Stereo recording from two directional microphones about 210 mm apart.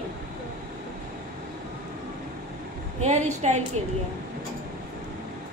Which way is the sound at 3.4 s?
30° right (ahead or behind).